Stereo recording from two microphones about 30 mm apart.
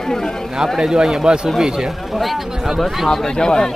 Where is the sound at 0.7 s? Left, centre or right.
Centre.